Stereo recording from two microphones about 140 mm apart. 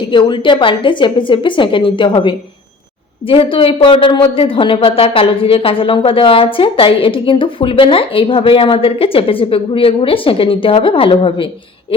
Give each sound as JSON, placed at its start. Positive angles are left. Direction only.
{"t": 0.1, "sound": "a woman's voice", "side_deg": 35}